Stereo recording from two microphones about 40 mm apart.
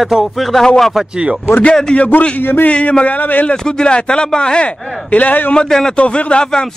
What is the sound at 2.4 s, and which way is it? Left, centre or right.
Speech, left.